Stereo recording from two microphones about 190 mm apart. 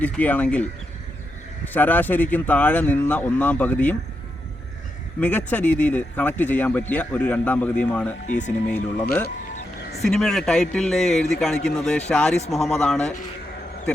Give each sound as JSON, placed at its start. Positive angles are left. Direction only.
{"t": 0.0, "sound": "speech", "side_deg": 10}
{"t": 5.5, "sound": "speech", "side_deg": 10}
{"t": 8.3, "sound": "speech", "side_deg": 40}
{"t": 8.6, "sound": "speech", "side_deg": 5}
{"t": 10.1, "sound": "a man's voice", "side_deg": 5}